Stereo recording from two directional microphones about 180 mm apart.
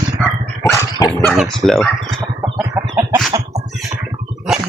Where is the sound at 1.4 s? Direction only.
Centre (ahead or behind).